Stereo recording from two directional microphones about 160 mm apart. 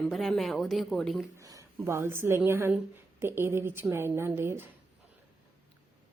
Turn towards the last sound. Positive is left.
turn(degrees=-15)  # may be behind; listen again after turning